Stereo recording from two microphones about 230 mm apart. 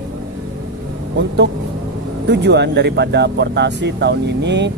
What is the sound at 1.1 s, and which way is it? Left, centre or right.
Speech, right.